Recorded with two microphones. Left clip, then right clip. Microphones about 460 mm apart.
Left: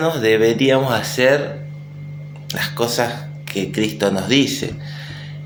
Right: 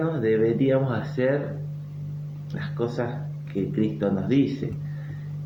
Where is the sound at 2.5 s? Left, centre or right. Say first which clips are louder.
Left 10 dB; right.